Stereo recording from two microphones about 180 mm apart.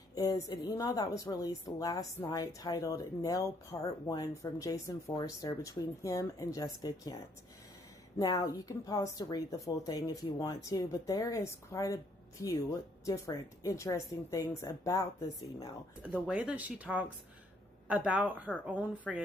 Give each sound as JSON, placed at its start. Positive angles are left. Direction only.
{"t": 0.1, "sound": "a woman's voice", "side_deg": 20}
{"t": 8.2, "sound": "a woman's voice", "side_deg": 20}
{"t": 16.1, "sound": "speech", "side_deg": -5}